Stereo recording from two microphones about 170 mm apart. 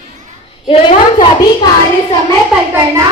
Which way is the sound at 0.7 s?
30° left (ahead or behind).